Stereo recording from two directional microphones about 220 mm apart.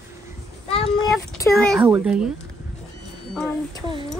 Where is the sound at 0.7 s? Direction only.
25° left (ahead or behind).